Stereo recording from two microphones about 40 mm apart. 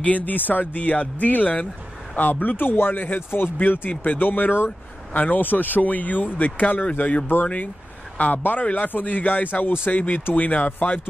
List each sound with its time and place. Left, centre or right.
0.2 s speech: left
2.5 s speech: left
3.3 s speech: left
5.1 s speech: left